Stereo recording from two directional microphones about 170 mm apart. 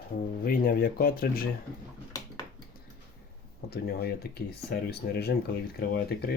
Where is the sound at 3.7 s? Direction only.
70° left (ahead or behind).